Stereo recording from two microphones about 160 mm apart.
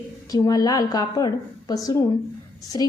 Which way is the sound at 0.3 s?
25° left (ahead or behind).